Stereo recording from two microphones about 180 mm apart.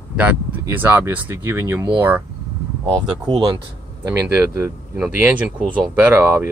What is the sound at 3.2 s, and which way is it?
Speech, 25° right (ahead or behind).